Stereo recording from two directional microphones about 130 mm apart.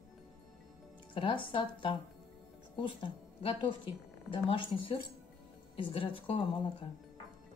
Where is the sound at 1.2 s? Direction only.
40° left (ahead or behind).